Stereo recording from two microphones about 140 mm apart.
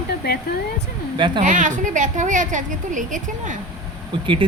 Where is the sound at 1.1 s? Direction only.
35° right (ahead or behind).